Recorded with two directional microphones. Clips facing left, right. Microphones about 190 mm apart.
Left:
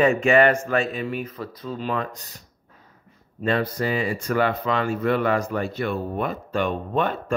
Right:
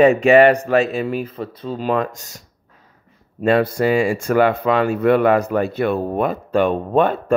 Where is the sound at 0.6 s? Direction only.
70° right (ahead or behind).